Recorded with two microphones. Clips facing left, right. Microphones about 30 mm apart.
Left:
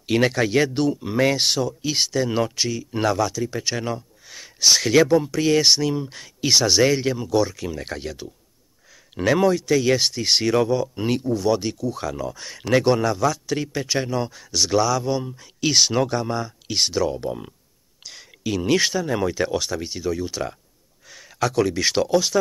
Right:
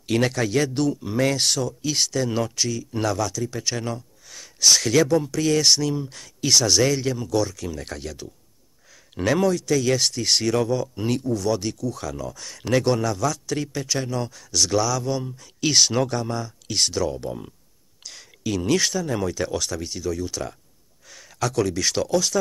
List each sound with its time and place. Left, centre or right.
0.0 s speech: centre